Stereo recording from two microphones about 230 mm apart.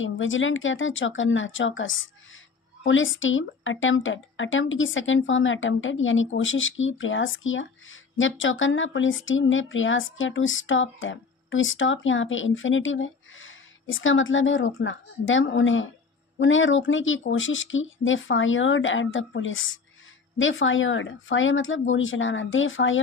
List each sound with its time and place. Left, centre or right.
0.0 s a woman's voice: left